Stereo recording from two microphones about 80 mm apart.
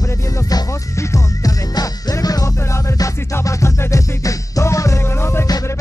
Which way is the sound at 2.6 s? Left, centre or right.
Left.